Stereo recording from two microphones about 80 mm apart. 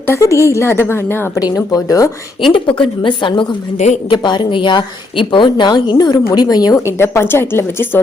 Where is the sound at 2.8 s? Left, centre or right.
Left.